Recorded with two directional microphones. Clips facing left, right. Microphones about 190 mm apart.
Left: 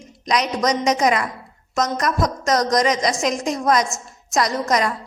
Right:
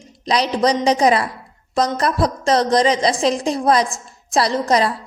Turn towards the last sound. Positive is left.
turn(degrees=-30)  # may be behind; listen again after turning